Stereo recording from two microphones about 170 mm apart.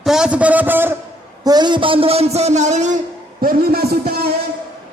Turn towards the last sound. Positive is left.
turn(degrees=-65)  # may be behind; listen again after turning